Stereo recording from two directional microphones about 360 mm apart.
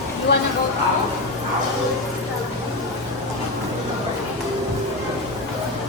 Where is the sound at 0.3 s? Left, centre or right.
Left.